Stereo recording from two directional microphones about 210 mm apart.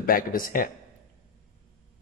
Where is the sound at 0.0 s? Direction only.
40° left (ahead or behind).